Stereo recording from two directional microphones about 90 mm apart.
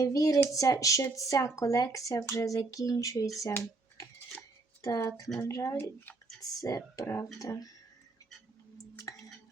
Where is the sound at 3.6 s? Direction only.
35° left (ahead or behind).